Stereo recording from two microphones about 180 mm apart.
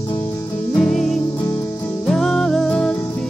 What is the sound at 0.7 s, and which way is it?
Music, 5° left (ahead or behind).